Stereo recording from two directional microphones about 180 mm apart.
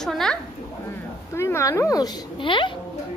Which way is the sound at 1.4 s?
15° left (ahead or behind).